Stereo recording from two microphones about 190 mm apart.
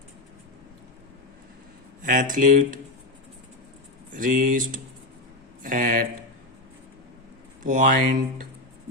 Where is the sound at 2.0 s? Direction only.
45° right (ahead or behind).